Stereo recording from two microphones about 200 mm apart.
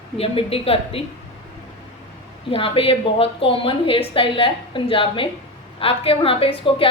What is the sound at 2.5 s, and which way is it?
A woman's voice, 25° left (ahead or behind).